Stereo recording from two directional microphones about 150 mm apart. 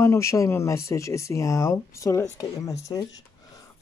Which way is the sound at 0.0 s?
20° left (ahead or behind).